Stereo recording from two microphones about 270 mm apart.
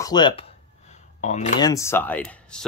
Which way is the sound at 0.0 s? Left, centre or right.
Centre.